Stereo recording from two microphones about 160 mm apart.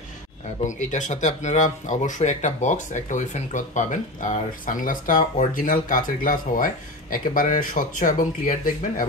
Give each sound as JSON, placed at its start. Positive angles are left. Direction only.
{"t": 0.7, "sound": "speech", "side_deg": 50}